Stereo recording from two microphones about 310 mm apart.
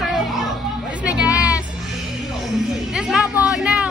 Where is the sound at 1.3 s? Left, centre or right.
Centre.